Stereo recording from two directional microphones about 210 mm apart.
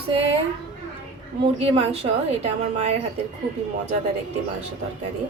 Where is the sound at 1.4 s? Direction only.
25° right (ahead or behind).